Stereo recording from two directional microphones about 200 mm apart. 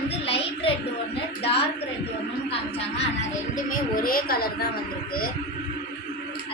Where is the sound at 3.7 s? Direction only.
45° left (ahead or behind).